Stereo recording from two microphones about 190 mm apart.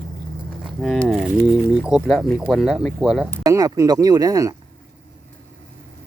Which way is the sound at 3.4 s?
15° right (ahead or behind).